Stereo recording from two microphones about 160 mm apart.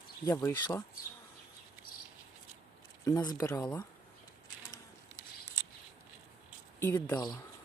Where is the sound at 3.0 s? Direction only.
25° left (ahead or behind).